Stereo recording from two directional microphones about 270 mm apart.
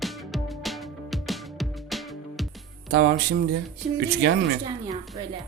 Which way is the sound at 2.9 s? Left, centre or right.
Right.